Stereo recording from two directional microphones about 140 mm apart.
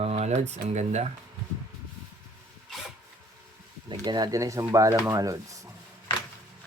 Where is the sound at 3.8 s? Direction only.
30° right (ahead or behind).